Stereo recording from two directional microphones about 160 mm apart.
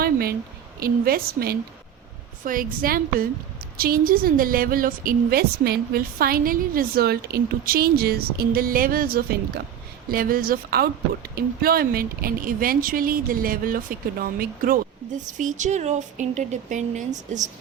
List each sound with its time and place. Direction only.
0.0 s a sound: 70° right (ahead or behind)
0.8 s a woman's voice: 70° right (ahead or behind)
2.4 s a woman's voice: 60° right (ahead or behind)